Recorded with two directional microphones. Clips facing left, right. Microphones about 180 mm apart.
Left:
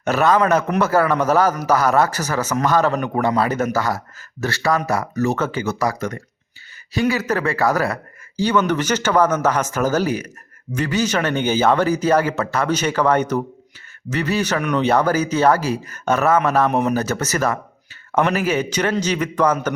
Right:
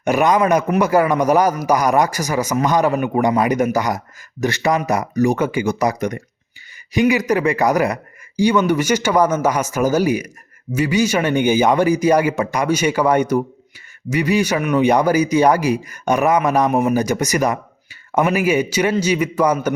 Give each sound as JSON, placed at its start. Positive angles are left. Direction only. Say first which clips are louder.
{"t": 0.0, "sound": "a man's voice", "louder": "right 1 dB", "side_deg": -15}